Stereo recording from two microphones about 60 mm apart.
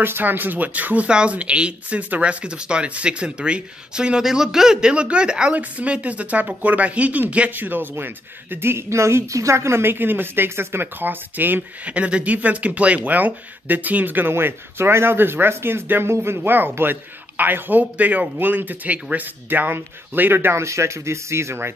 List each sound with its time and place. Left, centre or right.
0.0 s speech: right
11.8 s speech: right